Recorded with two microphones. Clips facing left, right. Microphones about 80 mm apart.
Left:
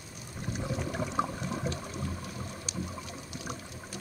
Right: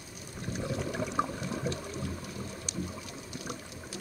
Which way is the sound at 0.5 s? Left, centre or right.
Centre.